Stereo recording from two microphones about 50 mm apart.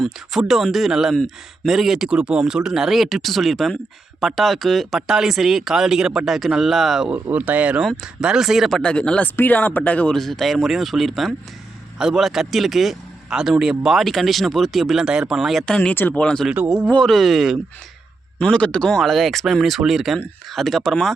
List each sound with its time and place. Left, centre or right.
0.0 s speech: centre
5.0 s speech: centre
7.1 s speech: right
8.0 s speech: centre
8.8 s speech: centre
9.2 s speech: left
10.1 s speech: centre
14.0 s speech: centre
15.6 s speech: centre
17.0 s speech: centre
18.5 s speech: left
18.9 s speech: centre